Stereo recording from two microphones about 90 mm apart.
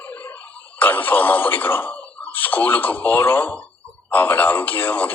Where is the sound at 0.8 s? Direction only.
20° left (ahead or behind).